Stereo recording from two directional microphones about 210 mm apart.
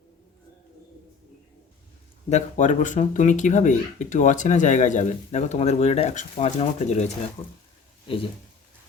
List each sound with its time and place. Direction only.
2.3 s speech: 35° left (ahead or behind)